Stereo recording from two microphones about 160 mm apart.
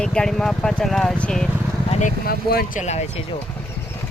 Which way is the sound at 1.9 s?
50° left (ahead or behind).